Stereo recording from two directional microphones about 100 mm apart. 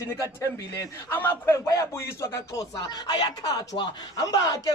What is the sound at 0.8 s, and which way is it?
Speech, 25° left (ahead or behind).